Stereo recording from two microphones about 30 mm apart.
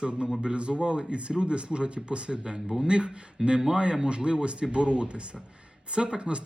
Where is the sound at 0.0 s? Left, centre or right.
Right.